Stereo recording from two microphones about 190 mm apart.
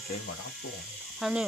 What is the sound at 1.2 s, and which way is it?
Speech, centre (ahead or behind).